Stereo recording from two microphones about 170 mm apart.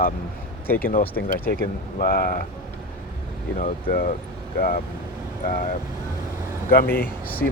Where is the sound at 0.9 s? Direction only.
55° left (ahead or behind).